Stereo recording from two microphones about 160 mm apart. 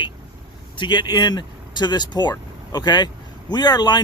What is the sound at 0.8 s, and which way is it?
Speech, 30° left (ahead or behind).